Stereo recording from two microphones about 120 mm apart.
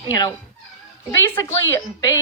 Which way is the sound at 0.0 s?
30° left (ahead or behind).